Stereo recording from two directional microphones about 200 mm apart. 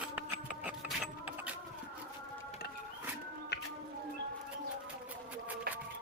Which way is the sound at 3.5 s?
55° left (ahead or behind).